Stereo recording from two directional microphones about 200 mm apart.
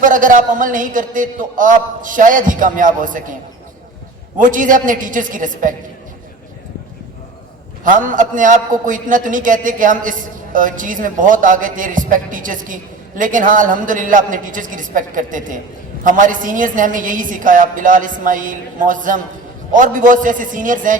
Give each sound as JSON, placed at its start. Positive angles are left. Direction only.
{"t": 0.0, "sound": "a man's voice", "side_deg": -40}
{"t": 4.4, "sound": "a man's voice", "side_deg": -40}
{"t": 7.9, "sound": "a man's voice", "side_deg": -40}